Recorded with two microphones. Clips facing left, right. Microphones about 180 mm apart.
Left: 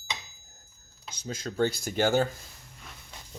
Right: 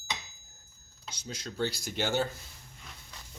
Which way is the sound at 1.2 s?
50° left (ahead or behind).